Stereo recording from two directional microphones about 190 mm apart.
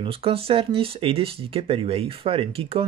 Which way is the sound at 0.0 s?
30° right (ahead or behind).